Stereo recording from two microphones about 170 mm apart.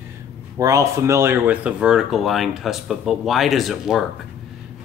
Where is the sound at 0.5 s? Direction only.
20° right (ahead or behind); by 4.1 s centre (ahead or behind).